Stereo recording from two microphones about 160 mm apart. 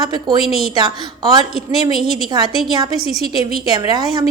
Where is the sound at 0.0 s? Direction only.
25° right (ahead or behind).